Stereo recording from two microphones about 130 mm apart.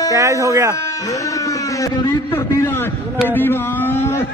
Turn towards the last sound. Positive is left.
turn(degrees=15)  # may be behind; listen again after turning